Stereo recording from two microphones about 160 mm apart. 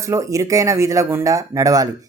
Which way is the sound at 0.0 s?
20° right (ahead or behind).